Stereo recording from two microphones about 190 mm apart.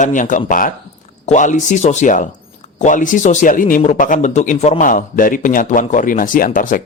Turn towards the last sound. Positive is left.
turn(degrees=45)  # may be behind; listen again after turning